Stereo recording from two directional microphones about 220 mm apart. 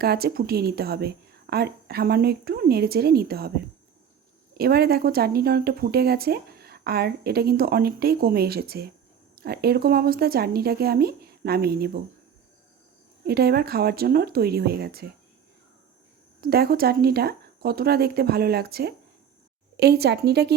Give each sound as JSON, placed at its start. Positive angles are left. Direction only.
{"t": 0.0, "sound": "speech", "side_deg": -45}
{"t": 4.5, "sound": "speech", "side_deg": -45}
{"t": 13.2, "sound": "speech", "side_deg": -45}
{"t": 16.4, "sound": "speech", "side_deg": -45}